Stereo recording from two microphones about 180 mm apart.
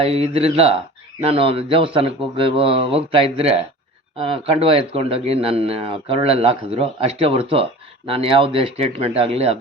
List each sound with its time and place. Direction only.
0.0 s speech: 35° right (ahead or behind)